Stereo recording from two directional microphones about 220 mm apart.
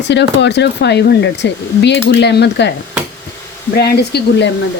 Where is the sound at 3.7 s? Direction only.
45° left (ahead or behind).